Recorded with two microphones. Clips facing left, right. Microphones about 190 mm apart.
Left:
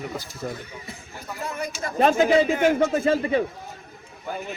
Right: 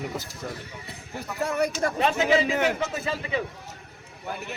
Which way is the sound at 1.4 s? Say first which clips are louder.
Right 6 dB; 70° right (ahead or behind).